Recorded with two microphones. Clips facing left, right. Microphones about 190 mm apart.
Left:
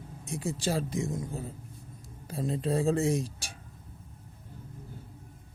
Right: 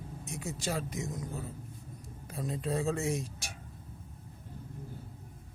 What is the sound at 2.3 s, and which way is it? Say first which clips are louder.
Speech: left 5 dB; 30° left (ahead or behind).